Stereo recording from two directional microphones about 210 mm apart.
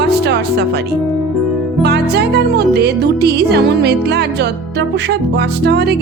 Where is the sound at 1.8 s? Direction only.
50° right (ahead or behind).